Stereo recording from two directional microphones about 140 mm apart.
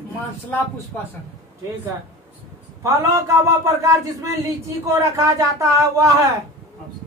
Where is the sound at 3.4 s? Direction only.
20° right (ahead or behind).